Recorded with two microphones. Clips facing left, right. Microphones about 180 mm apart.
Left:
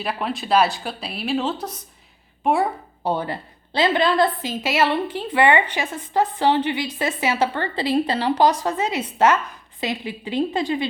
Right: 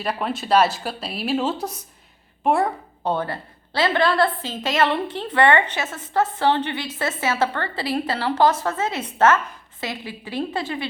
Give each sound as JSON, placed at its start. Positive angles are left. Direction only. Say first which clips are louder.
{"t": 0.0, "sound": "a woman's voice", "louder": "even", "side_deg": 0}